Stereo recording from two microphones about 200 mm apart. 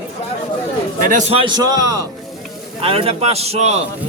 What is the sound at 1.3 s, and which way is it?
Speech, 25° right (ahead or behind).